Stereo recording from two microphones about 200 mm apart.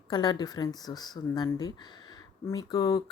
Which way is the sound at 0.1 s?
20° left (ahead or behind).